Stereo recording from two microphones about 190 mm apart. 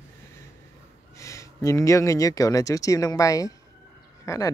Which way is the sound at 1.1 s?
15° left (ahead or behind).